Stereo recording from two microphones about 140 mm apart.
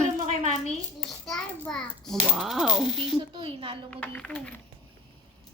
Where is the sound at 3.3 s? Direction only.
40° right (ahead or behind).